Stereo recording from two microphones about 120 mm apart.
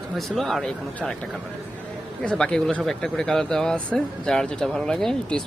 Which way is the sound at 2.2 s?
5° left (ahead or behind).